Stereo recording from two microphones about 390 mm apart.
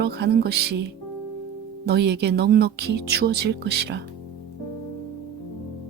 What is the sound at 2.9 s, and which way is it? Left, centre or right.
Speech, right.